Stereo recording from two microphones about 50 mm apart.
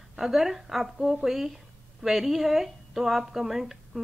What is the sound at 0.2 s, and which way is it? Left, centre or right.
A woman's voice, centre.